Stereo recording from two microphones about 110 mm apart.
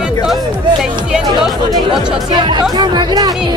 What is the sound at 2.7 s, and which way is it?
Speech, 40° right (ahead or behind).